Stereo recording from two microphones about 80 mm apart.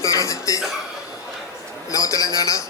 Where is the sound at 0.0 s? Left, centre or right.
Left.